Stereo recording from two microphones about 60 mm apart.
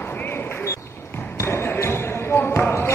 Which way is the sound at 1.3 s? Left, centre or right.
Left.